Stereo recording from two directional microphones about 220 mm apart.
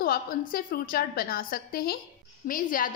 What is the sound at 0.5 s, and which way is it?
A woman's voice, 40° left (ahead or behind).